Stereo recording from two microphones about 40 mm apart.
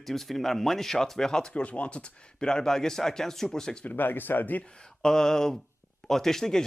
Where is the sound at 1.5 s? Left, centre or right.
Left; by 3.8 s centre.